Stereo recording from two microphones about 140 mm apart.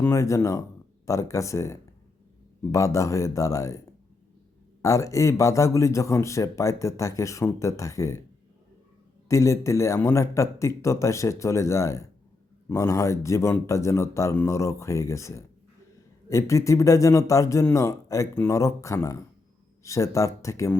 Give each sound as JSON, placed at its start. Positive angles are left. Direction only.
{"t": 0.0, "sound": "a man's voice", "side_deg": 20}
{"t": 4.8, "sound": "a man's voice", "side_deg": 25}
{"t": 9.3, "sound": "a man's voice", "side_deg": 20}